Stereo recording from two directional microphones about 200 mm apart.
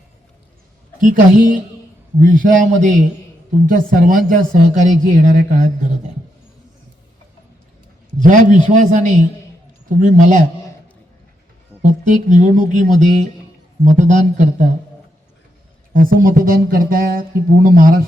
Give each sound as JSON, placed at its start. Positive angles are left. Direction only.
{"t": 1.0, "sound": "speech", "side_deg": -40}
{"t": 8.2, "sound": "speech", "side_deg": -40}
{"t": 11.8, "sound": "speech", "side_deg": -40}
{"t": 15.9, "sound": "speech", "side_deg": -45}